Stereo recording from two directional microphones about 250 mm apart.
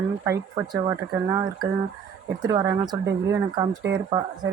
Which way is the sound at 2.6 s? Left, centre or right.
Centre.